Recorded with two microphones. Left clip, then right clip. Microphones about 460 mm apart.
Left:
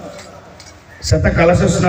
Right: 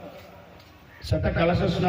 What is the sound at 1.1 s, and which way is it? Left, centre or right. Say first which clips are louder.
Speech: left 11 dB; right.